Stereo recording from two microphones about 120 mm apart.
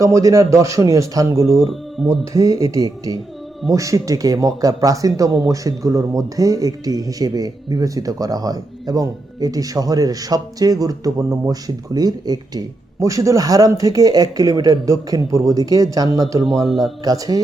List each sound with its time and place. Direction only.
0.0 s speech: 25° right (ahead or behind)
1.7 s speech: centre (ahead or behind)
2.3 s speech: 25° right (ahead or behind)
16.6 s a man's voice: centre (ahead or behind)
17.0 s speech: 30° right (ahead or behind)